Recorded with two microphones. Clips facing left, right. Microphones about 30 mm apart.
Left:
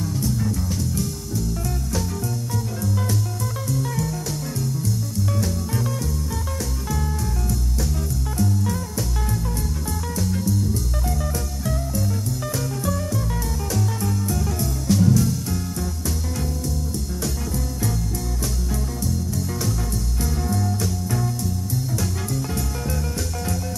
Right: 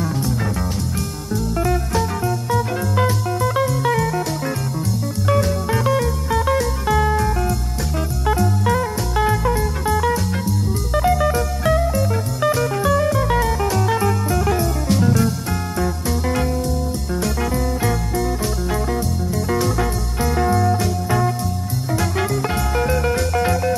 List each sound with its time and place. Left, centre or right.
0.0 s music: right